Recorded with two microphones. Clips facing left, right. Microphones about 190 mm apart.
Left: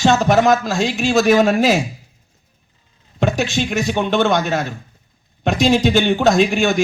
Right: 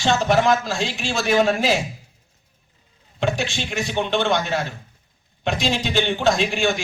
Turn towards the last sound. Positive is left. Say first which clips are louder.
# left 5 dB
turn(degrees=45)  # may be behind; listen again after turning